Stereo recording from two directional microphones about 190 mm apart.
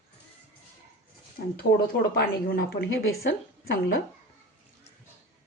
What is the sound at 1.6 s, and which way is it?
Speech, 55° left (ahead or behind).